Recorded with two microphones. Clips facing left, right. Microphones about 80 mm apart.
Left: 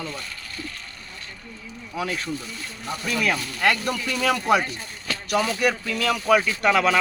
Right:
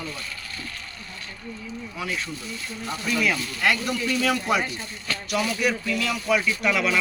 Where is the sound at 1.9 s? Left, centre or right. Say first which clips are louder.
Left 4 dB; left.